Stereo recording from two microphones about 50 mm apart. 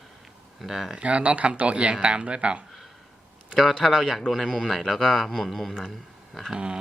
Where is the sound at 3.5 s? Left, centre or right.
Centre.